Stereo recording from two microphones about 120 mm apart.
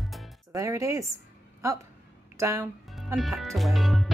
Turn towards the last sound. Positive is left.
turn(degrees=0)  # may be behind; listen again after turning